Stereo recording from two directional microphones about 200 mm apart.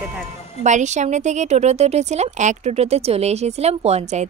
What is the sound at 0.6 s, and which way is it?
A woman's voice, 35° right (ahead or behind).